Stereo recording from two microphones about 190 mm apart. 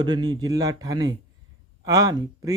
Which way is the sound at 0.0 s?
20° right (ahead or behind).